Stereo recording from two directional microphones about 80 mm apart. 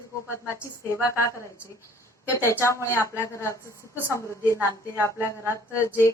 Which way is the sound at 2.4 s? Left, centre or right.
Left.